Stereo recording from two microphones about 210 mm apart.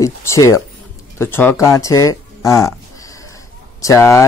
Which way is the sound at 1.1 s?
10° left (ahead or behind).